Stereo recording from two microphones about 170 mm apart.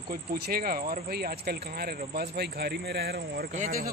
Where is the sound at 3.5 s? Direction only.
50° right (ahead or behind).